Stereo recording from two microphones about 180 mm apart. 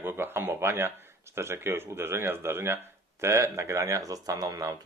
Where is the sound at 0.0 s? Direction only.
10° right (ahead or behind).